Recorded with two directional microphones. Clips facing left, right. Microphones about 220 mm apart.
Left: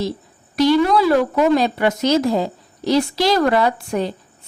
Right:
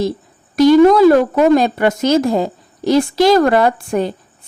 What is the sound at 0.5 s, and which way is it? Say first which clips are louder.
A woman's voice: right 7 dB; 45° right (ahead or behind).